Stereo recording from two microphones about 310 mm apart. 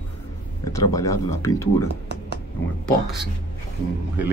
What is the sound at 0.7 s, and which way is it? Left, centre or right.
Speech, centre.